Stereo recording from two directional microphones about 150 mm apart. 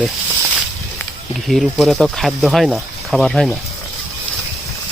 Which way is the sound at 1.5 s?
Centre (ahead or behind).